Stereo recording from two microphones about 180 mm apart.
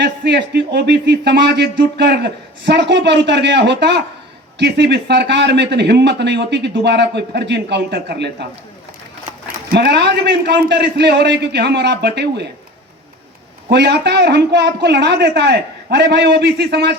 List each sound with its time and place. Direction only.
0.0 s a man's voice: 70° right (ahead or behind)
9.6 s a man's voice: 65° right (ahead or behind)
13.7 s a man's voice: 70° right (ahead or behind)